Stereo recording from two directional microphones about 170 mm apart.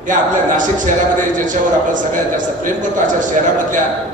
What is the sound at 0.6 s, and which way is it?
A man's voice, 50° right (ahead or behind).